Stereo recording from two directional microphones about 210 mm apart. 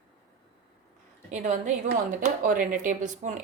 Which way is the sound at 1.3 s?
35° right (ahead or behind).